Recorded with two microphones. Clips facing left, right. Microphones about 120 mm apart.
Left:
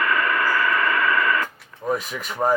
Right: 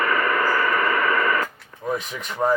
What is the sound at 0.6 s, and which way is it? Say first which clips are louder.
Radio: even; 25° right (ahead or behind).